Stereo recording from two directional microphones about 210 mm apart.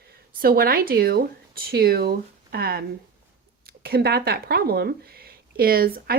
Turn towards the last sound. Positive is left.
turn(degrees=-45)  # may be behind; listen again after turning